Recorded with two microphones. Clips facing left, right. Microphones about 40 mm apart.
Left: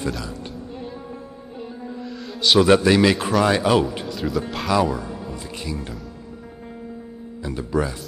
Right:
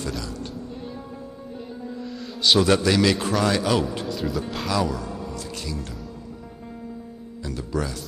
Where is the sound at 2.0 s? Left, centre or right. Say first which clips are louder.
Left 1 dB; centre.